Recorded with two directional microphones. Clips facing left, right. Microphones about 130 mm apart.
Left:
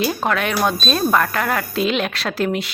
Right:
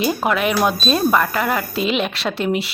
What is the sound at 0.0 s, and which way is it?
Speech, 5° right (ahead or behind).